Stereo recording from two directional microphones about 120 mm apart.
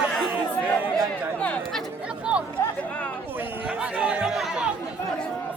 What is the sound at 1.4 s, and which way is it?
Speech, 10° left (ahead or behind).